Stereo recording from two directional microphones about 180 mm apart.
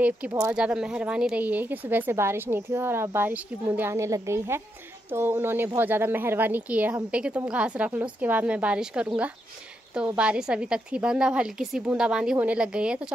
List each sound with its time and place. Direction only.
0.3 s speech: 20° right (ahead or behind)
0.6 s a woman's voice: 5° right (ahead or behind)